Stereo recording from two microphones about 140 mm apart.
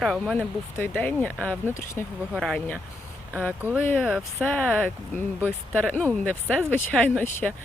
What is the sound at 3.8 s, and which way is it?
Speech, 15° left (ahead or behind).